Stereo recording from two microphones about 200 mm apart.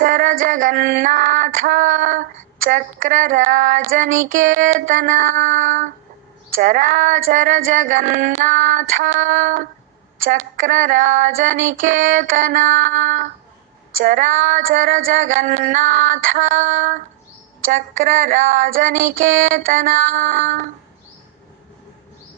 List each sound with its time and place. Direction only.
0.0 s female singing: 45° right (ahead or behind)